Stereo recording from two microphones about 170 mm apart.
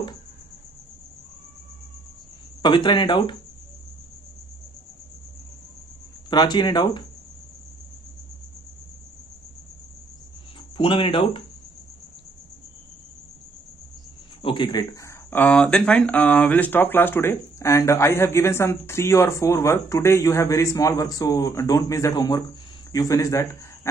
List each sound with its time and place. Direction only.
2.6 s speech: 25° left (ahead or behind)
6.3 s speech: 25° left (ahead or behind)
10.8 s speech: 30° left (ahead or behind)
14.4 s speech: 25° left (ahead or behind)